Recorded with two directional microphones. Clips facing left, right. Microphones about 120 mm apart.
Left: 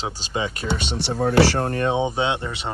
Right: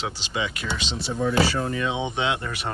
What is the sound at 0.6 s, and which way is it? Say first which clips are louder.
Speech: left 4 dB; 60° left (ahead or behind).